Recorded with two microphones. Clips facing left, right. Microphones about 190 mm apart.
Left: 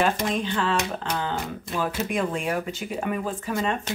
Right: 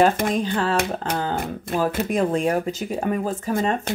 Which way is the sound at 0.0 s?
45° right (ahead or behind).